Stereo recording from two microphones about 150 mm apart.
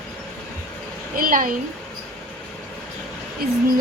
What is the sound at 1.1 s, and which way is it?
Speech, 65° right (ahead or behind).